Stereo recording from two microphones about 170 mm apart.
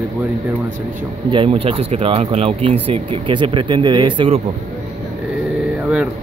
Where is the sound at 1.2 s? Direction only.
30° right (ahead or behind).